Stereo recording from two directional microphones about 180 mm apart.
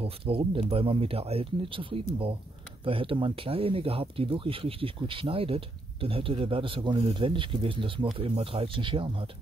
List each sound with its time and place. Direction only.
0.0 s speech: 30° right (ahead or behind)